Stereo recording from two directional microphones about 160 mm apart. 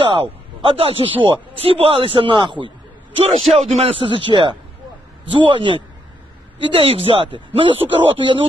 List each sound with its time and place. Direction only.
0.0 s a sound: 35° right (ahead or behind)
1.2 s speech: 35° right (ahead or behind)
3.4 s speech: centre (ahead or behind)
3.7 s speech: 40° right (ahead or behind)